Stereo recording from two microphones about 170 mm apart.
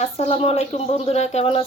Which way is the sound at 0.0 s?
40° left (ahead or behind).